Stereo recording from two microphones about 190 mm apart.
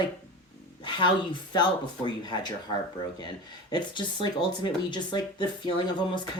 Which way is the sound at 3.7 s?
25° left (ahead or behind).